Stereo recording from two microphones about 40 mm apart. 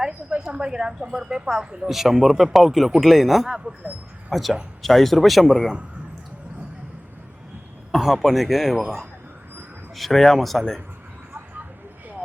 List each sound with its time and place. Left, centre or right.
0.4 s a woman's voice: centre
1.9 s speech: centre
7.9 s speech: centre
9.9 s speech: centre